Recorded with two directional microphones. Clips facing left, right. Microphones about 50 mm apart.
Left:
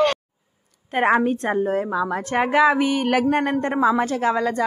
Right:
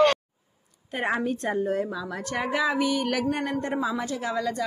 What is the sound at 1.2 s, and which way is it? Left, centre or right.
A woman's voice, left.